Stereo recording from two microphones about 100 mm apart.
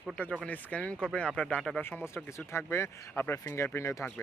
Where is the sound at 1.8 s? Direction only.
20° left (ahead or behind).